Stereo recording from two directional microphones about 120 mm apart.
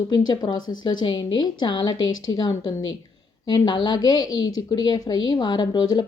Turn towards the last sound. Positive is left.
turn(degrees=35)  # may be behind; listen again after turning